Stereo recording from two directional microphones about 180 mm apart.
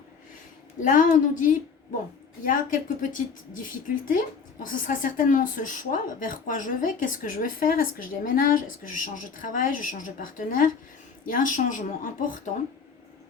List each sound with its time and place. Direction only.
0.8 s speech: 45° left (ahead or behind)